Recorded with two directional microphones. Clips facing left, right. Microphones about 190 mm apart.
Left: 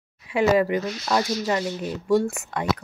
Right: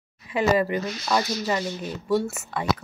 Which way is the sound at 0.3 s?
15° left (ahead or behind).